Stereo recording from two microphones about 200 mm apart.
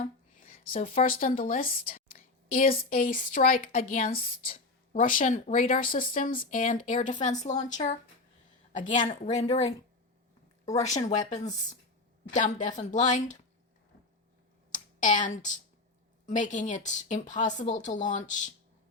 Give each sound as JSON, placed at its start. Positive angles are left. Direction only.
{"t": 0.0, "sound": "a woman's voice", "side_deg": 40}
{"t": 10.8, "sound": "speech", "side_deg": 35}
{"t": 14.7, "sound": "a sound", "side_deg": 40}
{"t": 16.2, "sound": "speech", "side_deg": 40}